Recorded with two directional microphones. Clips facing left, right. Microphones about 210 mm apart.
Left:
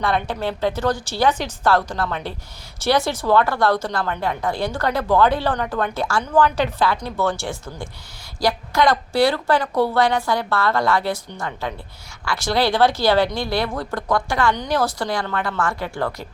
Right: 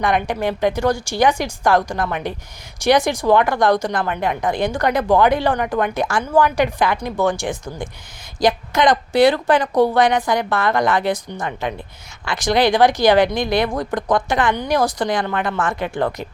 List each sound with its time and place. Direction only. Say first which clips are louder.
0.0 s a woman's voice: right 3 dB; 15° right (ahead or behind)